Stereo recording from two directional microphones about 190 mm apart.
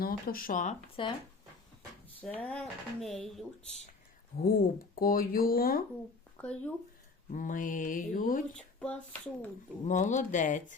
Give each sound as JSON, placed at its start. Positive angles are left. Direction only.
{"t": 0.0, "sound": "speech", "side_deg": 50}
{"t": 1.0, "sound": "speech", "side_deg": 25}
{"t": 2.2, "sound": "speech", "side_deg": 5}
{"t": 4.4, "sound": "speech", "side_deg": 50}
{"t": 6.3, "sound": "speech", "side_deg": 5}
{"t": 7.3, "sound": "speech", "side_deg": 45}
{"t": 8.8, "sound": "a sound", "side_deg": 5}
{"t": 9.8, "sound": "speech", "side_deg": 40}